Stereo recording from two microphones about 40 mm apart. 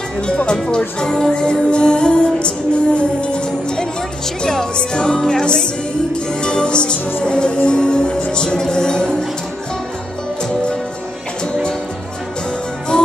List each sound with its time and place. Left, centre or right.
0.7 s music: left
12.9 s music: centre